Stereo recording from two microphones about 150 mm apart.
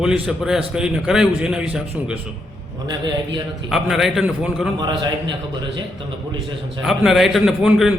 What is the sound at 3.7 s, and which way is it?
A man's voice, centre (ahead or behind).